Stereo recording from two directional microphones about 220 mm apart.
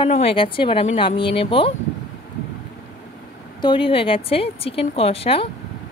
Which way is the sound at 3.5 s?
20° left (ahead or behind).